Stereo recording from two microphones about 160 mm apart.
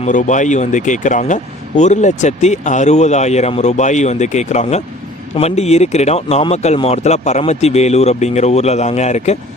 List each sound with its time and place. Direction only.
0.0 s speech: 55° left (ahead or behind)